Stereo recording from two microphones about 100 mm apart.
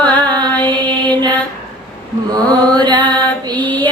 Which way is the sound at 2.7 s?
45° right (ahead or behind).